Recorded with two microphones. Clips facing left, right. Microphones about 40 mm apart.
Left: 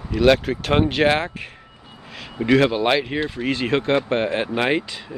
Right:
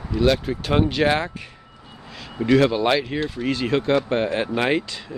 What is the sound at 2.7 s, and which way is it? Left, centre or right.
Speech, centre.